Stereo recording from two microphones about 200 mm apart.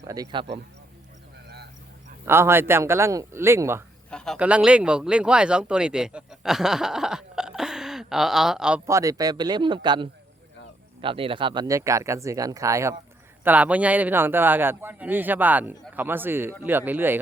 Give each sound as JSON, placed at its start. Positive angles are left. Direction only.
{"t": 0.1, "sound": "speech", "side_deg": -20}
{"t": 2.2, "sound": "a man's voice", "side_deg": -10}
{"t": 4.1, "sound": "a sound", "side_deg": 5}
{"t": 4.4, "sound": "speech", "side_deg": -5}
{"t": 8.9, "sound": "a man's voice", "side_deg": -15}